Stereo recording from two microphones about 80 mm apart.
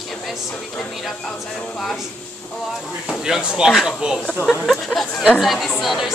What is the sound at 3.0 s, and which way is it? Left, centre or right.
Speech, centre.